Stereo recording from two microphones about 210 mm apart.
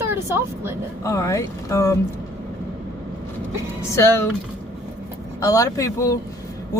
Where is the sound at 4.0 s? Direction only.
10° left (ahead or behind).